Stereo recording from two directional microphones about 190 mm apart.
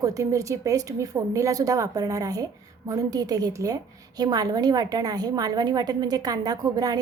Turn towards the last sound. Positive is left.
turn(degrees=-20)  # may be behind; listen again after turning